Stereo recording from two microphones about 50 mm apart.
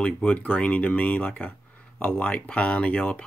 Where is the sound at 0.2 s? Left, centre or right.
Left.